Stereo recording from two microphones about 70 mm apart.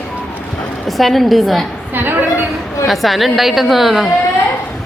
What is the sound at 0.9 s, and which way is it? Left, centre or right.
Speech, centre.